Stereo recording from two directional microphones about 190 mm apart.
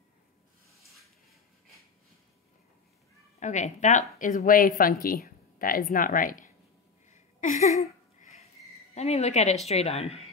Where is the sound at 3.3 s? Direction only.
40° left (ahead or behind).